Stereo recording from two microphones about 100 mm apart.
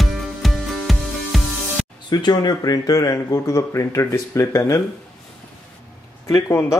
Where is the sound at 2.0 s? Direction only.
45° left (ahead or behind); by 4.8 s 30° left (ahead or behind).